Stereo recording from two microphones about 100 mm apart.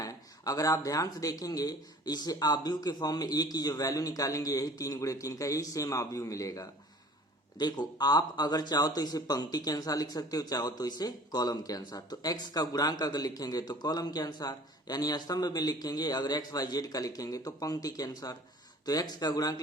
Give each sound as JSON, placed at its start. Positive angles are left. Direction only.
{"t": 0.0, "sound": "speech", "side_deg": 35}